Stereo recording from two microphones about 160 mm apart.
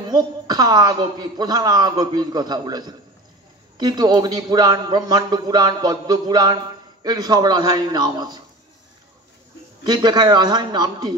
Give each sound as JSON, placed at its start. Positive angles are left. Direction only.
{"t": 0.1, "sound": "a man's voice", "side_deg": -25}
{"t": 9.8, "sound": "a man's voice", "side_deg": -25}